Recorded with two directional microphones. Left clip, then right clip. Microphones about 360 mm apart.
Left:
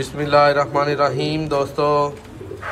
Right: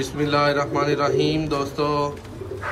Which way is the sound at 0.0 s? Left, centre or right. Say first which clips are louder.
Left 6 dB; centre.